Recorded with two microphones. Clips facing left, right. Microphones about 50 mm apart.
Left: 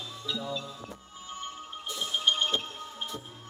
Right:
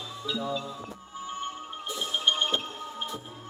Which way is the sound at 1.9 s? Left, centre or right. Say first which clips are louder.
Right 1 dB; centre.